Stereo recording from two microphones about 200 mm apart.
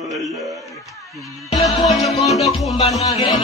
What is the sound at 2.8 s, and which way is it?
Music, 30° left (ahead or behind).